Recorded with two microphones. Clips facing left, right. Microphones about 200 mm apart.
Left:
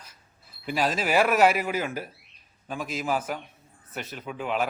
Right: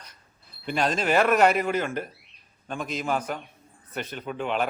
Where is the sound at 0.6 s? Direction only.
5° left (ahead or behind).